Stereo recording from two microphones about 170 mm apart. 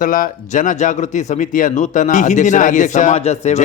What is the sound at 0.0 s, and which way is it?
Speech, 55° left (ahead or behind).